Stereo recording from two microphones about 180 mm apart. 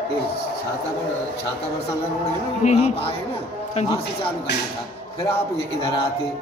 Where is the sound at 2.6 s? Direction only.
40° left (ahead or behind).